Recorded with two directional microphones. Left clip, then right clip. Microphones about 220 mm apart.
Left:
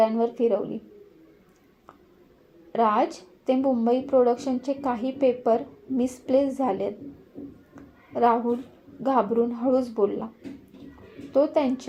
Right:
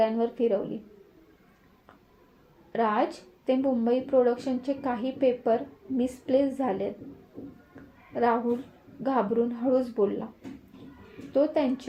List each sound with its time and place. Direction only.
0.0 s a woman's voice: 20° left (ahead or behind)
2.7 s a woman's voice: 20° left (ahead or behind)
8.1 s a woman's voice: 20° left (ahead or behind)
11.3 s a woman's voice: 20° left (ahead or behind)